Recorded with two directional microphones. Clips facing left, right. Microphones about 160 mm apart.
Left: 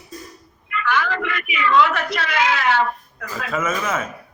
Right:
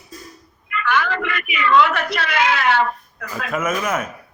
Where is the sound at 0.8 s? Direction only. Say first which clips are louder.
Right 1 dB; 60° right (ahead or behind).